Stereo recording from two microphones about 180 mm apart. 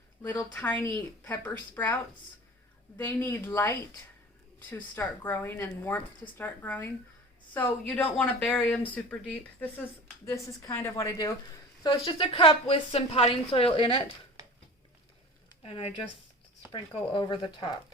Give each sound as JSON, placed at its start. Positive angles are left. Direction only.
{"t": 0.3, "sound": "speech", "side_deg": 10}
{"t": 3.0, "sound": "a woman's voice", "side_deg": 10}
{"t": 15.6, "sound": "a woman's voice", "side_deg": 30}